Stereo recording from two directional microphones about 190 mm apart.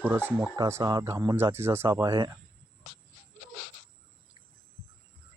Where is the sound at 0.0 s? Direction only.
10° right (ahead or behind).